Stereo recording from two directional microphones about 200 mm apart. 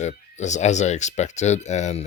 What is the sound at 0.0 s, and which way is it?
Speech, 35° left (ahead or behind).